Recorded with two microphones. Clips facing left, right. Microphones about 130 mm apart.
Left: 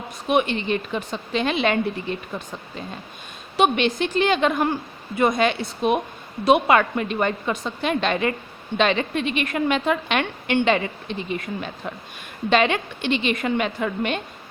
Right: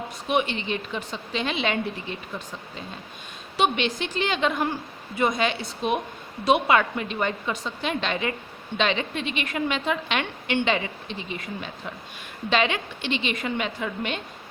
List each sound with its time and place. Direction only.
0.3 s a woman's voice: 50° left (ahead or behind)
3.6 s a woman's voice: 55° left (ahead or behind)